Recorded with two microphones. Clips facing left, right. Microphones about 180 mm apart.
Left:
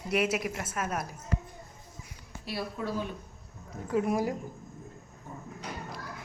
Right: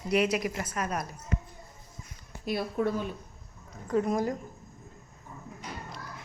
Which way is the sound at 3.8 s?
5° left (ahead or behind).